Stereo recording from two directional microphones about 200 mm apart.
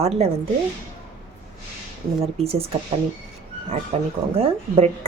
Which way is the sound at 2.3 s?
30° right (ahead or behind).